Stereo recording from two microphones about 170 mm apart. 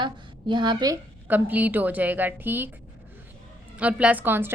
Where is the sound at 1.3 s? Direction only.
10° right (ahead or behind).